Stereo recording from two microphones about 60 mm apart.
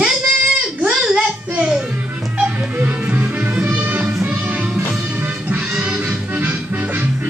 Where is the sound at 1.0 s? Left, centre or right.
Centre.